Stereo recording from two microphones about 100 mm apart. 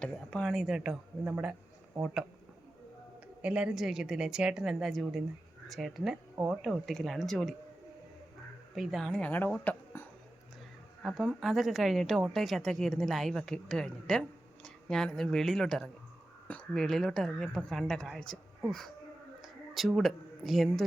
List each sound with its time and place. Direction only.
0.0 s speech: 10° left (ahead or behind)
0.5 s a man's voice: 5° right (ahead or behind)
3.4 s speech: 10° right (ahead or behind)
8.7 s speech: centre (ahead or behind)
9.6 s a sound: 20° left (ahead or behind)
11.0 s speech: centre (ahead or behind)
19.4 s speech: centre (ahead or behind)